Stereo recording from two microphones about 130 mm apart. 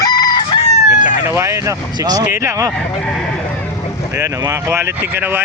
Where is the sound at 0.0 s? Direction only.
30° left (ahead or behind).